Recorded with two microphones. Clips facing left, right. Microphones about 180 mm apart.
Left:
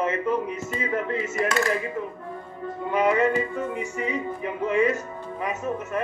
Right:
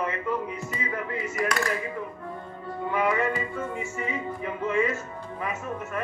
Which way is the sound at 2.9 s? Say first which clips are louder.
Left 5 dB; 20° left (ahead or behind).